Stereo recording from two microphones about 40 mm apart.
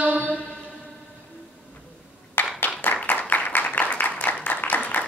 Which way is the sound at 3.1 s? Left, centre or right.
Left.